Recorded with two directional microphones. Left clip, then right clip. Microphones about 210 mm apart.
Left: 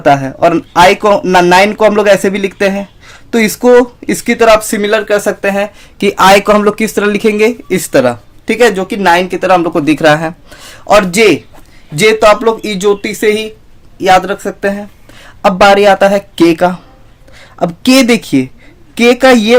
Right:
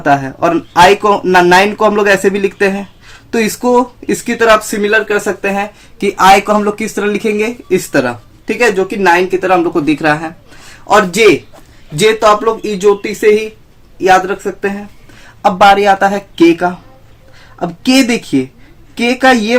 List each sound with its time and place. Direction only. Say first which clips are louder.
0.0 s speech: left 3 dB; 25° left (ahead or behind)